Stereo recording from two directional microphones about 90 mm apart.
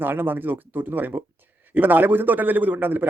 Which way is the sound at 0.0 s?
20° right (ahead or behind).